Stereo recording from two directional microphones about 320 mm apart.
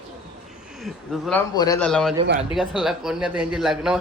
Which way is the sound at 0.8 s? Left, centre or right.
Centre.